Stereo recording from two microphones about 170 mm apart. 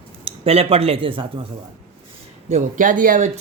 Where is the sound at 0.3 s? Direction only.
35° right (ahead or behind).